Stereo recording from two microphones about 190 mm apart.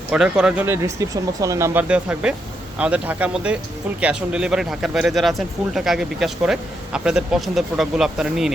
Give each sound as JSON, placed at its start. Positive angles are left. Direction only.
{"t": 0.1, "sound": "speech", "side_deg": -5}